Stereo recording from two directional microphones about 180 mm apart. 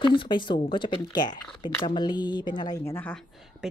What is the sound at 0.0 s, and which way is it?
Speech, 25° left (ahead or behind).